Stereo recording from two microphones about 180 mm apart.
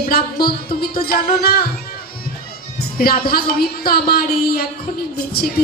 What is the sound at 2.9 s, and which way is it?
Speech, 55° left (ahead or behind).